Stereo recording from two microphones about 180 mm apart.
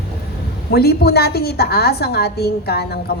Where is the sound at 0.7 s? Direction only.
60° left (ahead or behind).